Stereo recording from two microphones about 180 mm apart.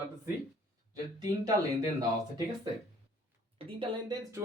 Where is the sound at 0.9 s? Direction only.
20° right (ahead or behind).